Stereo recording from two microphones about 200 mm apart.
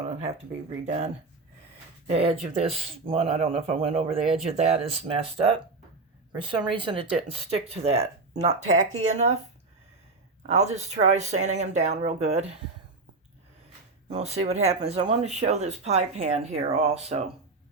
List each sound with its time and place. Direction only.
0.9 s speech: 35° right (ahead or behind)
4.2 s speech: centre (ahead or behind)
4.5 s speech: 30° right (ahead or behind)
10.4 s speech: 35° right (ahead or behind)
14.1 s speech: 30° right (ahead or behind)